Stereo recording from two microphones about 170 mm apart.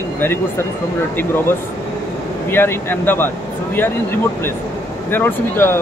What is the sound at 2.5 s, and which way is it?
Speech, 15° left (ahead or behind).